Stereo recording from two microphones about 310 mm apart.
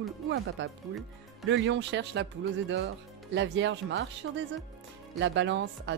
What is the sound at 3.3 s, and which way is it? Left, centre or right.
Speech, right.